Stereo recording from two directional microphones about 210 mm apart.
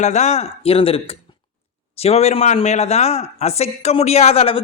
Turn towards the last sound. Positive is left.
turn(degrees=30)  # may be behind; listen again after turning